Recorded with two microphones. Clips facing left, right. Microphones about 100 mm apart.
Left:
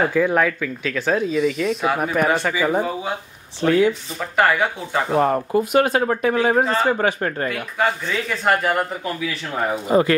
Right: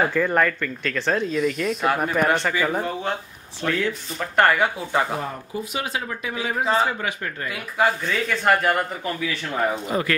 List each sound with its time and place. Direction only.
0.0 s speech: 5° left (ahead or behind)
3.6 s speech: 30° left (ahead or behind)
4.2 s speech: centre (ahead or behind)
5.1 s speech: 60° left (ahead or behind); by 7.4 s 45° left (ahead or behind)
7.7 s speech: centre (ahead or behind)
9.8 s speech: 30° left (ahead or behind)